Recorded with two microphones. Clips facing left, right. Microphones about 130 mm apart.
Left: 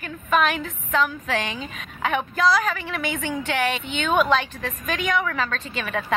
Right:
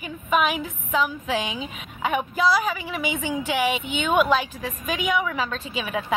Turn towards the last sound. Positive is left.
turn(degrees=-5)  # may be behind; listen again after turning